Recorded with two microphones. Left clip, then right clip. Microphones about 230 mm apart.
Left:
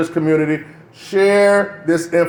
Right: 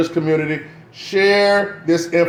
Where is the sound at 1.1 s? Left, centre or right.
Left.